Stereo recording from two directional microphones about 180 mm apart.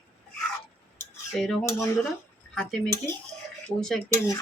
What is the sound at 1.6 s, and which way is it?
Speech, 15° left (ahead or behind).